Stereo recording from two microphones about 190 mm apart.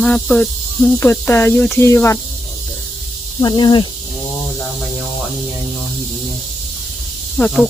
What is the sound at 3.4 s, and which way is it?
Speech, 25° left (ahead or behind).